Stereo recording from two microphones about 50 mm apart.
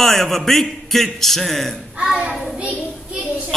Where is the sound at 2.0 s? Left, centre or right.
Centre.